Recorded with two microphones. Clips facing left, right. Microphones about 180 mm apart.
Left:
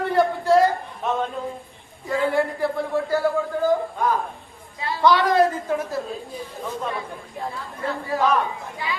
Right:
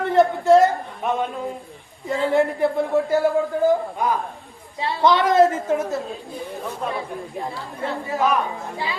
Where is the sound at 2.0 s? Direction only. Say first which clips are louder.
Right 2 dB; 25° right (ahead or behind).